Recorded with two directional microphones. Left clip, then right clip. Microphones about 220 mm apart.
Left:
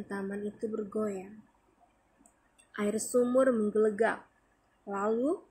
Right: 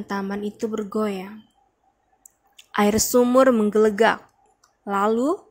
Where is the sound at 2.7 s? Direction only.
50° right (ahead or behind).